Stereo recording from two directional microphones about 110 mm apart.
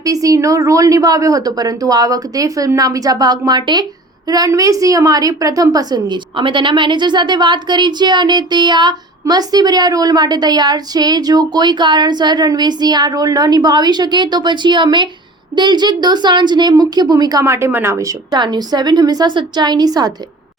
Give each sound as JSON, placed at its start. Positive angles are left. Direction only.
{"t": 0.0, "sound": "a woman's voice", "side_deg": -30}
{"t": 17.4, "sound": "a woman's voice", "side_deg": -25}
{"t": 18.3, "sound": "a woman's voice", "side_deg": -40}